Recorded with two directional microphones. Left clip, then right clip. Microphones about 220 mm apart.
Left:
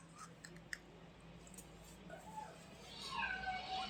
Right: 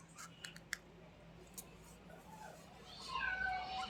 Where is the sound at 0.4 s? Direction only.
25° right (ahead or behind).